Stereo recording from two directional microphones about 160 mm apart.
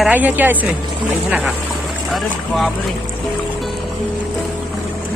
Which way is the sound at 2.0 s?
Centre (ahead or behind).